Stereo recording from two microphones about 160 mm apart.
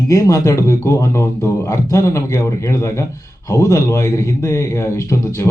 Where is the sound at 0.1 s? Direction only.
20° left (ahead or behind).